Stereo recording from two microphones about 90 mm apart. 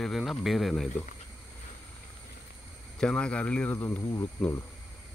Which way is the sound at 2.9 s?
10° left (ahead or behind).